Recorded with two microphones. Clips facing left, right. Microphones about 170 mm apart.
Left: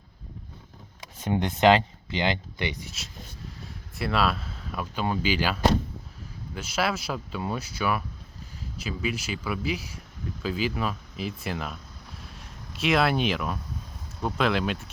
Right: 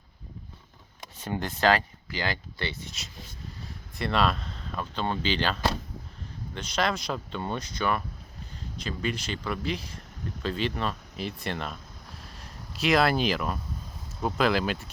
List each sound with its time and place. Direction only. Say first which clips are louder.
1.2 s speech: left 5 dB; 15° left (ahead or behind)
3.9 s speech: even; 5° left (ahead or behind)
12.2 s a sound: left 1 dB; centre (ahead or behind)
14.2 s speech: even; centre (ahead or behind)